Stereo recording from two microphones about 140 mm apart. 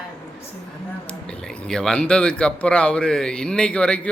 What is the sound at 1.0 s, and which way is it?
Speech, 5° left (ahead or behind).